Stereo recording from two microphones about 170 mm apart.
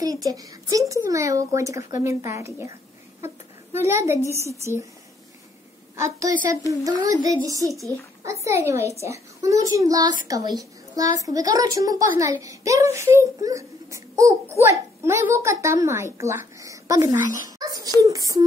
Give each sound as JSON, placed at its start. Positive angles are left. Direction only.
{"t": 0.0, "sound": "a child's voice", "side_deg": -20}
{"t": 3.7, "sound": "a woman's voice", "side_deg": -15}
{"t": 5.9, "sound": "a child's voice", "side_deg": -20}